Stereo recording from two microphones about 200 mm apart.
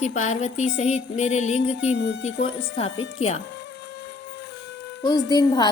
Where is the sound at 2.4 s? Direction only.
25° left (ahead or behind).